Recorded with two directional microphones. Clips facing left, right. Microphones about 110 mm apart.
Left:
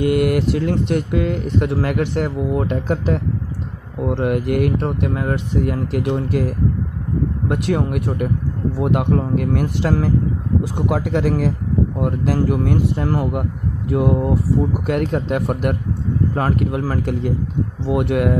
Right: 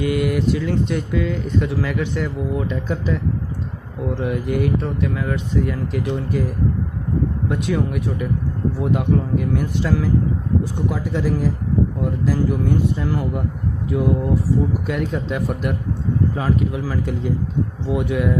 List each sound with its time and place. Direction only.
0.0 s speech: 60° left (ahead or behind)
7.4 s speech: 60° left (ahead or behind)
10.9 s speech: 75° left (ahead or behind)